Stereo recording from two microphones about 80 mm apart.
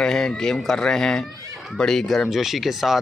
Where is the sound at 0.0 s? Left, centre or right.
Centre.